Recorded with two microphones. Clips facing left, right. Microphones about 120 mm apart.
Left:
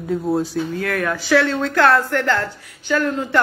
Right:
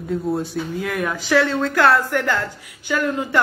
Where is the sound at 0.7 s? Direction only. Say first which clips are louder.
Even; 15° right (ahead or behind).